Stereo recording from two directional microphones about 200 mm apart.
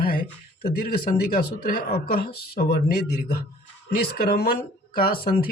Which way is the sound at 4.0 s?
50° left (ahead or behind).